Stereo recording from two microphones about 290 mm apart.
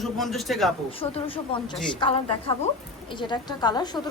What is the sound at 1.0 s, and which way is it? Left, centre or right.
A woman's voice, centre.